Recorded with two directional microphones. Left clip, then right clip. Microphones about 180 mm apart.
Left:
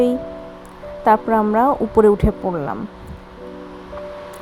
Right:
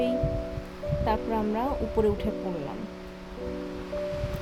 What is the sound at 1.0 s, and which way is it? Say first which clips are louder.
Speech: left 14 dB; 30° left (ahead or behind).